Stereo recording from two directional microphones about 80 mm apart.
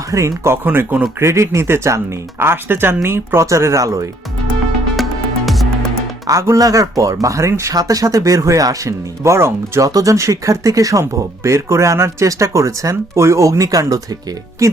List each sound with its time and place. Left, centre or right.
0.1 s speech: right
1.2 s speech: right
5.5 s music: centre
6.3 s speech: right